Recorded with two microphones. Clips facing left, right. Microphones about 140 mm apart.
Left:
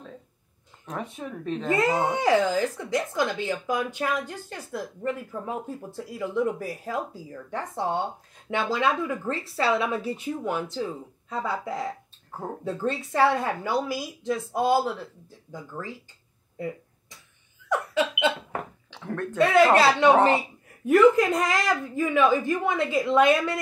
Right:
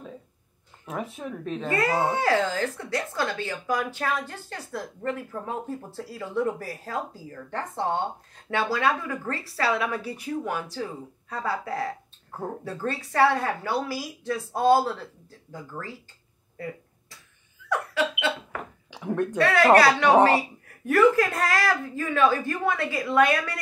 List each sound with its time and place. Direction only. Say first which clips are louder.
0.8 s speech: right 1 dB; centre (ahead or behind)
1.7 s a woman's voice: left 1 dB; 20° left (ahead or behind)
17.6 s laughter: left 1 dB; 15° left (ahead or behind)
18.9 s a sound: right 8 dB; 15° right (ahead or behind)
19.3 s a woman's voice: even; 20° left (ahead or behind)